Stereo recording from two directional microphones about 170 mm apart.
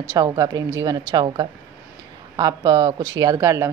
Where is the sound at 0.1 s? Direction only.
20° right (ahead or behind).